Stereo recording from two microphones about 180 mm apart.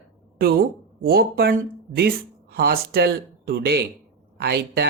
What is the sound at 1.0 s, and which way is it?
Speech, 55° right (ahead or behind).